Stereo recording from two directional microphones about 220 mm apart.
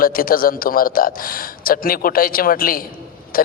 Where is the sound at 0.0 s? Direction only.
40° left (ahead or behind).